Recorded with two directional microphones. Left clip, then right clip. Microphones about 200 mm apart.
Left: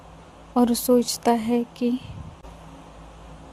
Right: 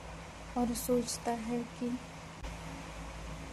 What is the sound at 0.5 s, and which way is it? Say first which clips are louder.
Speech: left 13 dB; 45° left (ahead or behind).